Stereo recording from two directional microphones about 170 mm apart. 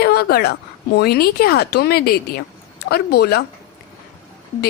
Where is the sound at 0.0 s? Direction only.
65° left (ahead or behind).